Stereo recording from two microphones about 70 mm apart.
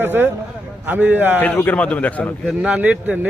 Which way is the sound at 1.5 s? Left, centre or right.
Left.